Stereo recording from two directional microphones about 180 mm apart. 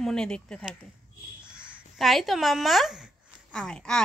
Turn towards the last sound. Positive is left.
turn(degrees=5)  # may be behind; listen again after turning